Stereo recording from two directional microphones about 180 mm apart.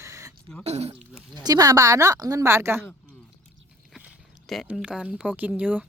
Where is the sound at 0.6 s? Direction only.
35° right (ahead or behind).